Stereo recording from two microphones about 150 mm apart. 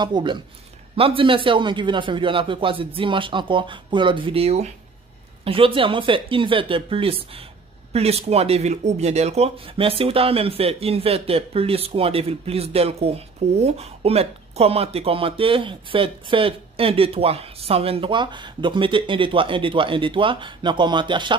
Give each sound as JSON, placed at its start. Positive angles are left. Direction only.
{"t": 0.0, "sound": "speech", "side_deg": -30}